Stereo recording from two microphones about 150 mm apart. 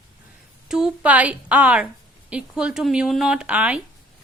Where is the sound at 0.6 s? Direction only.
5° right (ahead or behind).